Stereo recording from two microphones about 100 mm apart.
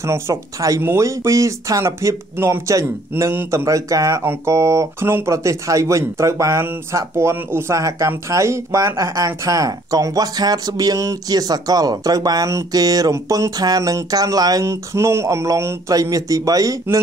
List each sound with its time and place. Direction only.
0.0 s speech: 30° right (ahead or behind)